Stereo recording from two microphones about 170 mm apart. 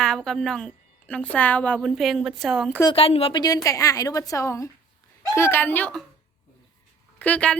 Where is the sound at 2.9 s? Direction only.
35° left (ahead or behind); by 6.0 s 10° left (ahead or behind).